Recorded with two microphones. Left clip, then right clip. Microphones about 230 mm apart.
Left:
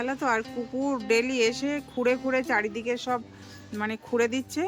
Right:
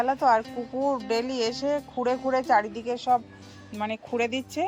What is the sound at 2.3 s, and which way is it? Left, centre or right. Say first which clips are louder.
Speech: right 3 dB; centre.